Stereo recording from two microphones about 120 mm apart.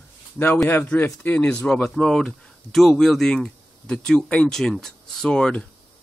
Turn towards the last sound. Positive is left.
turn(degrees=5)  # may be behind; listen again after turning